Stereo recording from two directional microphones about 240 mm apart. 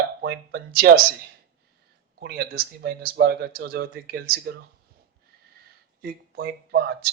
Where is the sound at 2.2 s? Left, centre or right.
Right.